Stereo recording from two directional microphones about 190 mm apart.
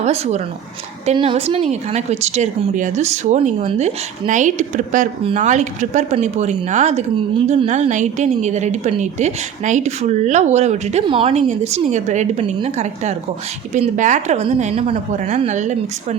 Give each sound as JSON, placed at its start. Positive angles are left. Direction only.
{"t": 0.0, "sound": "a woman's voice", "side_deg": -35}